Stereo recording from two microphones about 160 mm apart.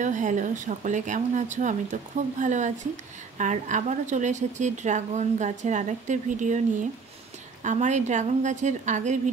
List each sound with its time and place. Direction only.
0.0 s a woman's voice: 50° right (ahead or behind)